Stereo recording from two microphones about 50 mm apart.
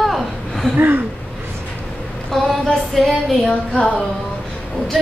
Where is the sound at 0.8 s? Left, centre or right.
Right.